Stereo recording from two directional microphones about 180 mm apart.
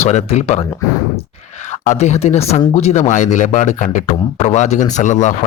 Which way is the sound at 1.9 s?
40° left (ahead or behind).